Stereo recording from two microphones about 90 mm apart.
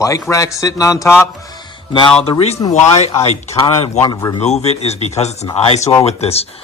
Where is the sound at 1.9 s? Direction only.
75° left (ahead or behind).